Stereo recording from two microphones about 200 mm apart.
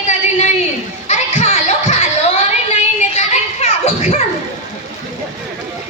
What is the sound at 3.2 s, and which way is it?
Children playing, 30° left (ahead or behind).